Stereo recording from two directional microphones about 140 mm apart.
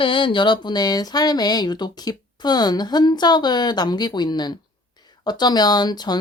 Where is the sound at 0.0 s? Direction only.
35° left (ahead or behind).